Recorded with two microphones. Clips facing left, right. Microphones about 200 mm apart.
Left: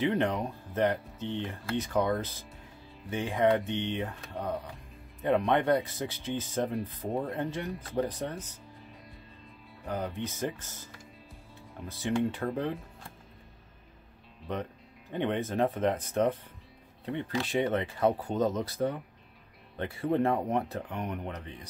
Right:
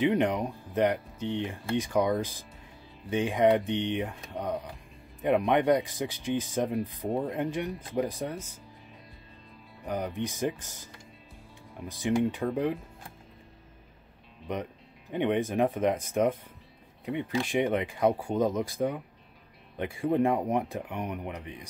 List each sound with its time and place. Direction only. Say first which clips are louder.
0.0 s speech: right 3 dB; 15° right (ahead or behind)
9.8 s speech: right 2 dB; 15° right (ahead or behind)
11.8 s speech: right 3 dB; 15° right (ahead or behind)
14.5 s speech: right 1 dB; 15° right (ahead or behind)